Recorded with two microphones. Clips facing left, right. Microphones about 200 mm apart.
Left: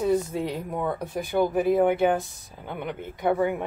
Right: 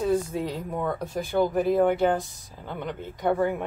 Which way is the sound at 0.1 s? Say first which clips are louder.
Left 1 dB; 20° left (ahead or behind).